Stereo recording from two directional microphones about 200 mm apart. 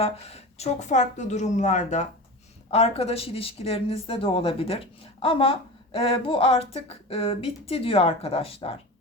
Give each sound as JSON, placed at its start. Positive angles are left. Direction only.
{"t": 0.0, "sound": "speech", "side_deg": 30}